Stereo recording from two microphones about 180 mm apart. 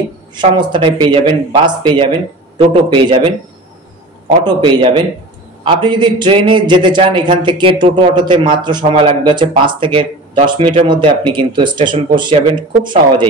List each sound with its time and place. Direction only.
0.4 s a man's voice: 25° right (ahead or behind)
4.5 s a man's voice: 25° right (ahead or behind)